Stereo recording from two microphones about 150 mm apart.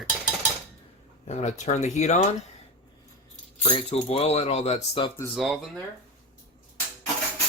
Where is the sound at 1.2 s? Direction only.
45° left (ahead or behind).